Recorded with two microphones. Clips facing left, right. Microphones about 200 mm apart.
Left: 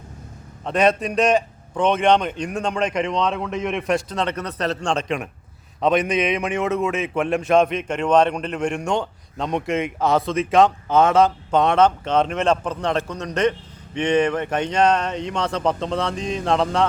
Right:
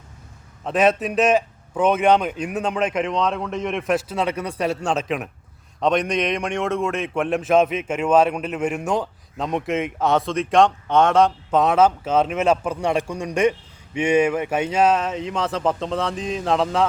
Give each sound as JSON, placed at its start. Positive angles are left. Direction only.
{"t": 0.6, "sound": "a man's voice", "side_deg": -5}